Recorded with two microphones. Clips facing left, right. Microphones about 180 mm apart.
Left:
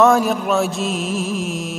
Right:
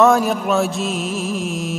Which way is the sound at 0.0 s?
Centre (ahead or behind).